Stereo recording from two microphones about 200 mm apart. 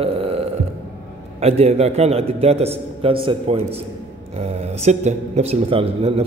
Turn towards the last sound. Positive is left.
turn(degrees=-30)  # may be behind; listen again after turning